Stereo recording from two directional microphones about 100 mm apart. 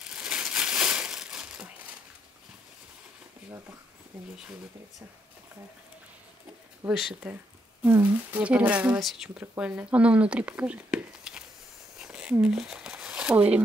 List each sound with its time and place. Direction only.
0.0 s crumpling: 10° right (ahead or behind)
6.9 s speech: centre (ahead or behind)
7.8 s speech: 15° right (ahead or behind)
12.0 s a sound: 10° right (ahead or behind)
13.3 s speech: 15° right (ahead or behind)